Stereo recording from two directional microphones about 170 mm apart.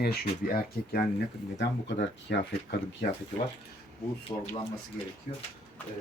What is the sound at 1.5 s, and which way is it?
Speech, 90° left.